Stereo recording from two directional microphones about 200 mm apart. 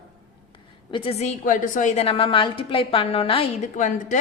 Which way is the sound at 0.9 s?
30° left (ahead or behind).